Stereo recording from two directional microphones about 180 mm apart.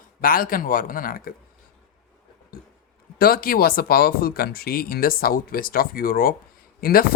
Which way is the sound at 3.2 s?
55° left (ahead or behind).